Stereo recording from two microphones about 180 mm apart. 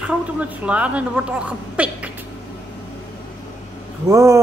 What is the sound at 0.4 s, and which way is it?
A woman's voice, 5° right (ahead or behind).